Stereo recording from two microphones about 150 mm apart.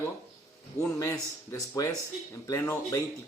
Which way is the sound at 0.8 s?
20° left (ahead or behind).